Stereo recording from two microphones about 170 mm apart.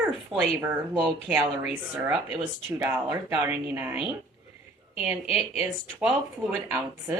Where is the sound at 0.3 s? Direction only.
30° right (ahead or behind).